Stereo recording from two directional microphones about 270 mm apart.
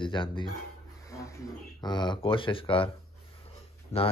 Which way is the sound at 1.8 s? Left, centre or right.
Centre.